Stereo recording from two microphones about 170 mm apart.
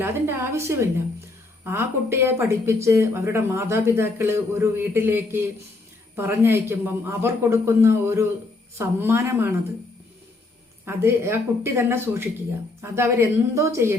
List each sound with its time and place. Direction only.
0.0 s speech: 15° right (ahead or behind)
10.8 s speech: 15° right (ahead or behind)